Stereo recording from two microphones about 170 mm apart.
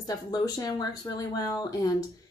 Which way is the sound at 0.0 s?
20° left (ahead or behind).